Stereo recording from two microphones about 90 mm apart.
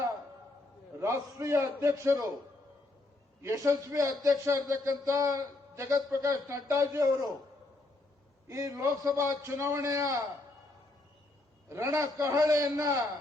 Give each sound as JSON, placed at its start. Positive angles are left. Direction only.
{"t": 0.9, "sound": "a man's voice", "side_deg": -30}
{"t": 3.4, "sound": "a man's voice", "side_deg": -35}
{"t": 8.4, "sound": "a man's voice", "side_deg": -40}
{"t": 11.7, "sound": "a man's voice", "side_deg": -35}